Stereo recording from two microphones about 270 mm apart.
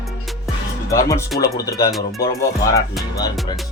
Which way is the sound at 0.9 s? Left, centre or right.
Centre.